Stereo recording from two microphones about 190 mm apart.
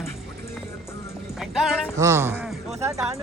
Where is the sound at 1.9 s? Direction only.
15° right (ahead or behind).